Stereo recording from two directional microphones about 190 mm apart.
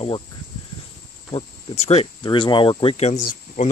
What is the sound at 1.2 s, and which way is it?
Speech, 30° left (ahead or behind).